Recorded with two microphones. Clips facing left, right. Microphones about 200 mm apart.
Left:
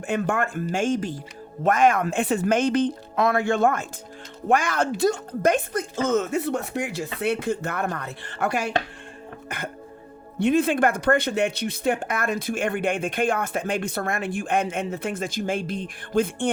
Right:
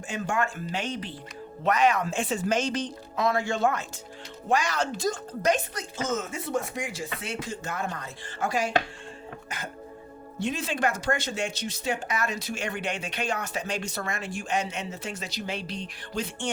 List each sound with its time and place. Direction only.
0.1 s speech: 55° left (ahead or behind)